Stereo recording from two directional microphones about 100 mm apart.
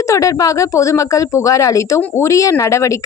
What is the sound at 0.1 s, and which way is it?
Speech, 35° left (ahead or behind).